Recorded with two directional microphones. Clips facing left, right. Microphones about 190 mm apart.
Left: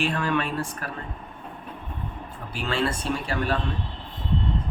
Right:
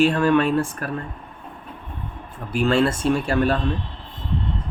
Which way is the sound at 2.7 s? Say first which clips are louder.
Right 7 dB; 45° right (ahead or behind).